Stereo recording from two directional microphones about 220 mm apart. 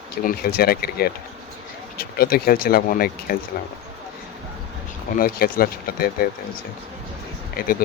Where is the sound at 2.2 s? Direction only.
45° left (ahead or behind).